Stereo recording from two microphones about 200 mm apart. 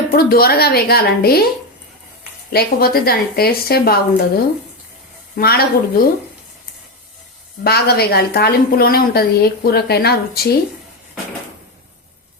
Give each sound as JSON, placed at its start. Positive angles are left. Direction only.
{"t": 0.1, "sound": "a woman's voice", "side_deg": 50}
{"t": 2.5, "sound": "a woman's voice", "side_deg": 50}
{"t": 7.6, "sound": "a woman's voice", "side_deg": 50}